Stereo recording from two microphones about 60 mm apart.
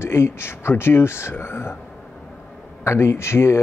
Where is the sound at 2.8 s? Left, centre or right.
Left.